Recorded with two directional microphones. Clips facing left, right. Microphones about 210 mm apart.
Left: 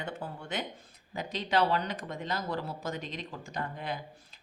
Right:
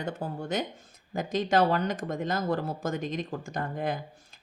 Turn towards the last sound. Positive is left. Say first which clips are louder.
# right 4 dB
turn(degrees=-45)  # may be behind; listen again after turning